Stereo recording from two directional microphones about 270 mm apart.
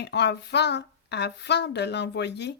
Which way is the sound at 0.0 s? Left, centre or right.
Left.